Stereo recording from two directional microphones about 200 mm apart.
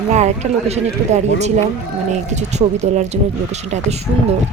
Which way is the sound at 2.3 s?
35° right (ahead or behind).